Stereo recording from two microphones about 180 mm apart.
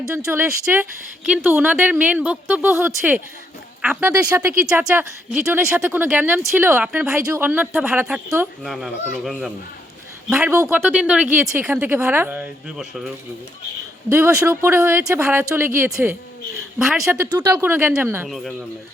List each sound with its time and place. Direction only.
0.1 s speech: 15° right (ahead or behind)
4.6 s speech: 5° right (ahead or behind)
10.5 s speech: 15° right (ahead or behind)
14.1 s speech: 15° right (ahead or behind)
17.3 s speech: 15° right (ahead or behind)